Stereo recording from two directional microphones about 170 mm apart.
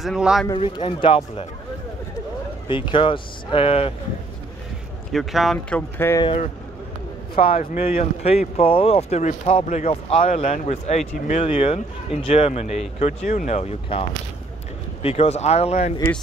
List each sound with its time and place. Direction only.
0.0 s speech: 5° right (ahead or behind)
0.6 s speech: 35° left (ahead or behind)
2.7 s speech: 30° left (ahead or behind)
5.1 s speech: centre (ahead or behind)
6.2 s speech: 40° left (ahead or behind)